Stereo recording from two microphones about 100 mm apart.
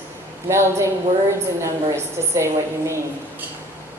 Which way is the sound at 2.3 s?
30° right (ahead or behind).